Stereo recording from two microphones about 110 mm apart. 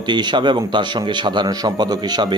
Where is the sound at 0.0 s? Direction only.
45° right (ahead or behind).